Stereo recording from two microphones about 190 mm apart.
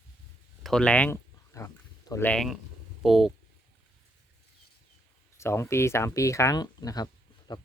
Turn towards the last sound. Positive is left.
turn(degrees=20)  # may be behind; listen again after turning